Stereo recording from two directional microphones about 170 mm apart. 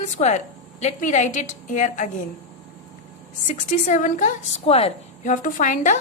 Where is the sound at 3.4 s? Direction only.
50° left (ahead or behind).